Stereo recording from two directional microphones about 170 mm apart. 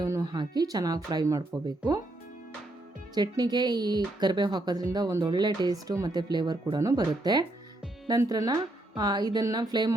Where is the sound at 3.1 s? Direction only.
25° right (ahead or behind).